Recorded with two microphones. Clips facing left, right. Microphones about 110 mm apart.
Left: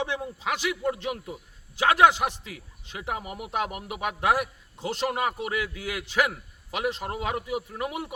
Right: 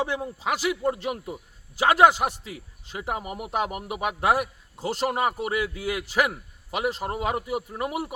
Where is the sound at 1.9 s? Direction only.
40° right (ahead or behind).